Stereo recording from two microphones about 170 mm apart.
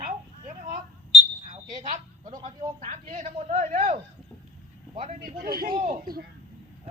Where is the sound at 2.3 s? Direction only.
25° right (ahead or behind).